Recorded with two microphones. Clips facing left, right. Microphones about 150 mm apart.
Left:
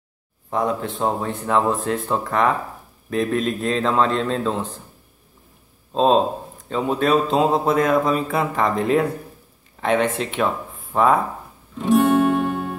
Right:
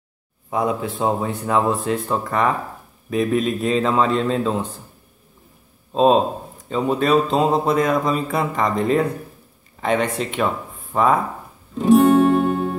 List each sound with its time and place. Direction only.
0.5 s a man's voice: 5° right (ahead or behind)
5.9 s a man's voice: 5° right (ahead or behind)
11.8 s guitar: 40° right (ahead or behind)